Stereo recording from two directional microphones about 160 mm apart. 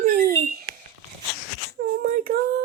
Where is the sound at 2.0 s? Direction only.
60° right (ahead or behind).